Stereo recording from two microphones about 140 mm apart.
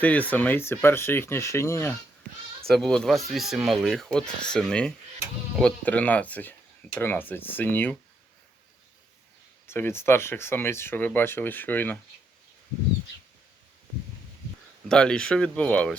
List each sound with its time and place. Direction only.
0.0 s speech: 10° left (ahead or behind)
2.6 s speech: centre (ahead or behind)
9.6 s speech: 15° left (ahead or behind)
14.8 s speech: 5° left (ahead or behind)